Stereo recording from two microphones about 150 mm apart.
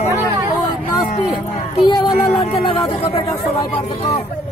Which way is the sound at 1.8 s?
30° left (ahead or behind).